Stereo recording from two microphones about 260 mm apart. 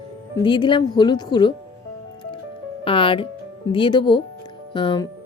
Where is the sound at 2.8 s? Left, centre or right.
Centre.